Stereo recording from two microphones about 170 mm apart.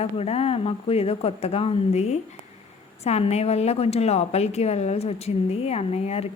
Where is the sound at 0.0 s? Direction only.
35° left (ahead or behind).